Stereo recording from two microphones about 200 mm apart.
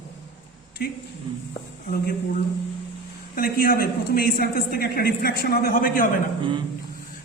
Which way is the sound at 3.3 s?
45° left (ahead or behind).